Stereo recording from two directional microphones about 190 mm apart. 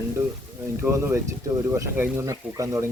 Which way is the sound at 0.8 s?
15° right (ahead or behind).